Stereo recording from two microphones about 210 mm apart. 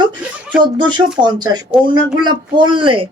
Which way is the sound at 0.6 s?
20° right (ahead or behind).